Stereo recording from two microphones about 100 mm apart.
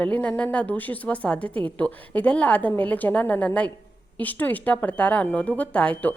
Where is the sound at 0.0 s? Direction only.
15° left (ahead or behind).